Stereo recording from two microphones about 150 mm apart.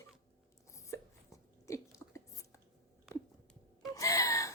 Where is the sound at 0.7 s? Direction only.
20° left (ahead or behind).